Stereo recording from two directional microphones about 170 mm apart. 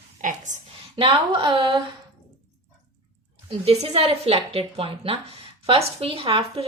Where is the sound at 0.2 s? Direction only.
45° right (ahead or behind).